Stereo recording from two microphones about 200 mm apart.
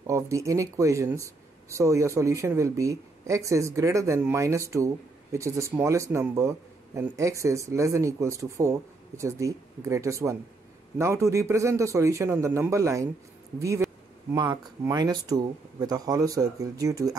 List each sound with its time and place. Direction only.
0.0 s speech: 15° right (ahead or behind)